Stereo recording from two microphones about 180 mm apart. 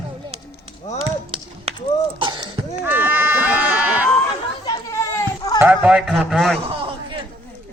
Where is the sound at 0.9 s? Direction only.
30° right (ahead or behind).